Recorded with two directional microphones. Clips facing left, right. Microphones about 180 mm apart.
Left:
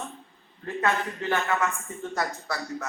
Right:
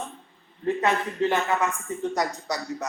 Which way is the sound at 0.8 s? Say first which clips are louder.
Right 1 dB; 20° right (ahead or behind).